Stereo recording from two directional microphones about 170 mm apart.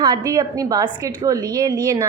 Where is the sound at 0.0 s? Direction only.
20° right (ahead or behind).